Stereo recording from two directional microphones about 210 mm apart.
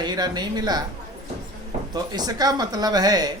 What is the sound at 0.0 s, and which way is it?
Speech, 20° right (ahead or behind).